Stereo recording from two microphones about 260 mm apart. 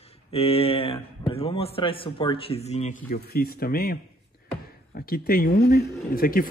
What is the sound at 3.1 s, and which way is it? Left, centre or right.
A man's voice, left.